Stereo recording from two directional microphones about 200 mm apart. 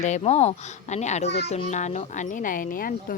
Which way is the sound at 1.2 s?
55° left (ahead or behind).